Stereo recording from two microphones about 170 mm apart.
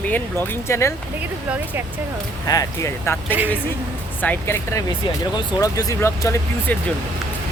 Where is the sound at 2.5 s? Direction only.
20° left (ahead or behind).